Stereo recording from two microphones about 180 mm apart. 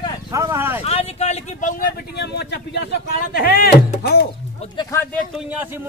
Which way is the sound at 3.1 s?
55° left (ahead or behind).